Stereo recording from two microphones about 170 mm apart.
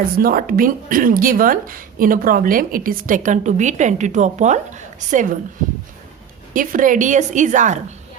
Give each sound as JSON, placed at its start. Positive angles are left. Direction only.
{"t": 0.2, "sound": "speech", "side_deg": -60}
{"t": 6.5, "sound": "speech", "side_deg": -50}